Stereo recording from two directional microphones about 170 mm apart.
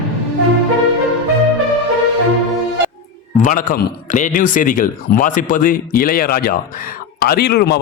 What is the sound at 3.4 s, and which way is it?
A man's voice, 50° left (ahead or behind).